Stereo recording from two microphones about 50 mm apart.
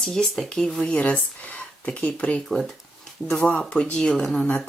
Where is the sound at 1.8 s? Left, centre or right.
Left.